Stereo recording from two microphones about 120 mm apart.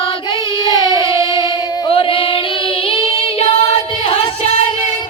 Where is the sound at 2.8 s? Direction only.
45° left (ahead or behind).